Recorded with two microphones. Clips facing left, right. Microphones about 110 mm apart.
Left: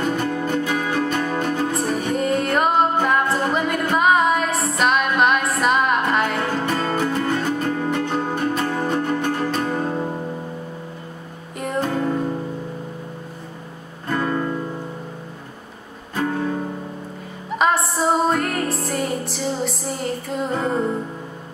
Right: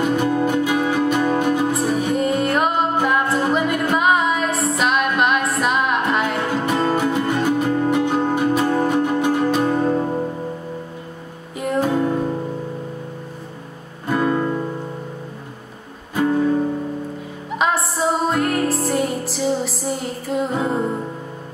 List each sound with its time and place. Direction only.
0.0 s music: 10° right (ahead or behind)
11.5 s music: centre (ahead or behind)
14.0 s music: 10° right (ahead or behind)
17.6 s music: centre (ahead or behind)